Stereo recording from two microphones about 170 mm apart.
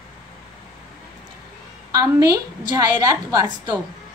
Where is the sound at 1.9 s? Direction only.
20° right (ahead or behind).